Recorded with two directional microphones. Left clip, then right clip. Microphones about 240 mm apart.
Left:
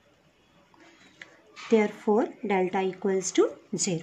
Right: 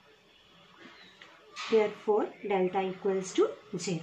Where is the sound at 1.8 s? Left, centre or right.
Left.